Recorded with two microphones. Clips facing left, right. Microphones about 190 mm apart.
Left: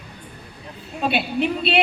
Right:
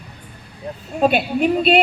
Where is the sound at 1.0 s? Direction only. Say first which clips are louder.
Right 5 dB; 45° right (ahead or behind).